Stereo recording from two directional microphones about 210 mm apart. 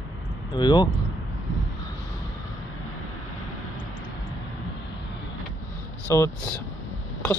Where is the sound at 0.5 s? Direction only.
20° left (ahead or behind).